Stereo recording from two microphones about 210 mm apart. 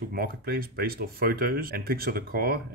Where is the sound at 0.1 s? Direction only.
45° right (ahead or behind).